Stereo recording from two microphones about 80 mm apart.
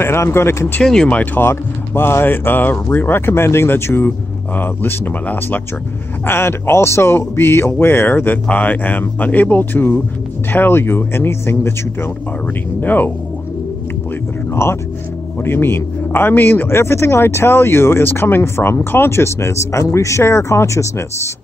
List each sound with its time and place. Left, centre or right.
0.0 s a man's voice: left
0.8 s speech: centre; by 11.7 s left
12.8 s speech: left
14.5 s a man's voice: left